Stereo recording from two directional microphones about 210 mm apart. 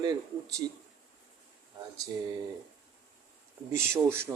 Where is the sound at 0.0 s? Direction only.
20° right (ahead or behind).